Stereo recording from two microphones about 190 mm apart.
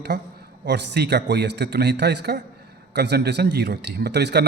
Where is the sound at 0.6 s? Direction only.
60° right (ahead or behind).